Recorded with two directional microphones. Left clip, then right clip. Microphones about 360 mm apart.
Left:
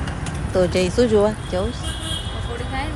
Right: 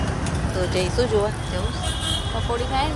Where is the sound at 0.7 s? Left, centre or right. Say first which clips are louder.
Left 4 dB; centre.